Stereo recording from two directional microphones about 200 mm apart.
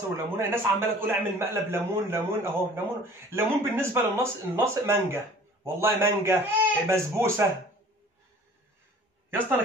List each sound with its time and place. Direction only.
0.4 s a man's voice: 10° right (ahead or behind)